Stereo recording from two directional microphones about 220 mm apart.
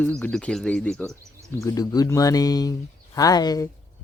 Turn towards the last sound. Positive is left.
turn(degrees=15)  # may be behind; listen again after turning